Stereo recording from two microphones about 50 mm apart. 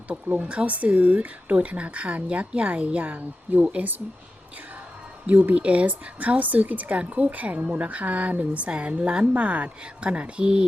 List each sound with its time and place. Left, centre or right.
0.1 s a woman's voice: right
5.5 s a woman's voice: right